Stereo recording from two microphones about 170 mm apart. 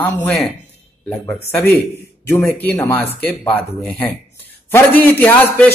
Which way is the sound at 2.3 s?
10° left (ahead or behind).